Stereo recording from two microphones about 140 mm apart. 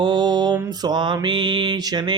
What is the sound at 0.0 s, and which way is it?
Mantra, 30° right (ahead or behind).